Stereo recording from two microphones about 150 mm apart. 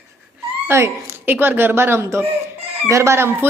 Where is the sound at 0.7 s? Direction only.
15° right (ahead or behind).